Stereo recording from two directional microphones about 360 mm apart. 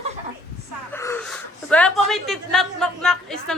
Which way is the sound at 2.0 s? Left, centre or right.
Centre.